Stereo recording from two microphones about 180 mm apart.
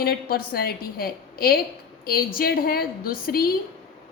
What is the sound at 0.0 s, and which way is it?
A woman's voice, 55° left (ahead or behind).